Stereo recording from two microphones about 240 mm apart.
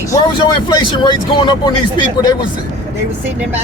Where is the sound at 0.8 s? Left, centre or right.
Centre.